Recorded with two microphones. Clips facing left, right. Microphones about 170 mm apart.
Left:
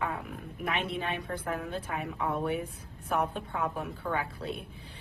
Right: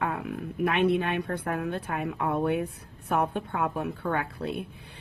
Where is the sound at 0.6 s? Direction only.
60° right (ahead or behind).